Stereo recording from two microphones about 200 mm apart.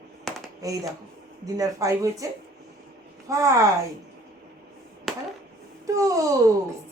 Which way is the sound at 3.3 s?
15° right (ahead or behind).